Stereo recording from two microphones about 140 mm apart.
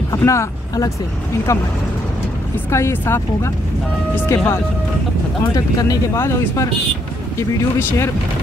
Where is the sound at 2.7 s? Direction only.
20° left (ahead or behind).